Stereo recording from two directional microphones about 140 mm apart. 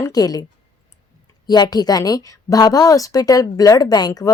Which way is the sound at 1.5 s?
30° left (ahead or behind).